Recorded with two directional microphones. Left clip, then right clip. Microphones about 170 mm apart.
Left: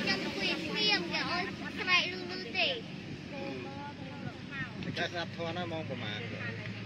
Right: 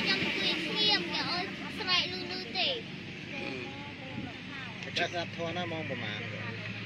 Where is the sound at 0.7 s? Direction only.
10° left (ahead or behind).